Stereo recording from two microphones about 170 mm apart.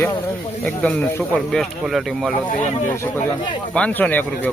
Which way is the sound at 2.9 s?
15° left (ahead or behind).